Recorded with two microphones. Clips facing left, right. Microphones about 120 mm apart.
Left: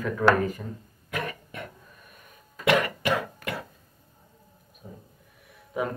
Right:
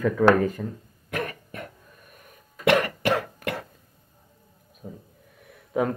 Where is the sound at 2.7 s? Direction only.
50° right (ahead or behind).